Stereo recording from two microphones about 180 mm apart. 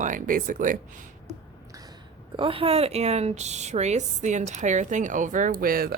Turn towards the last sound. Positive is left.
turn(degrees=-55)  # may be behind; listen again after turning